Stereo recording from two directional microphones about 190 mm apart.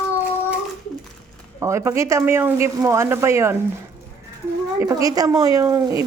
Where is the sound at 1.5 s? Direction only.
15° right (ahead or behind).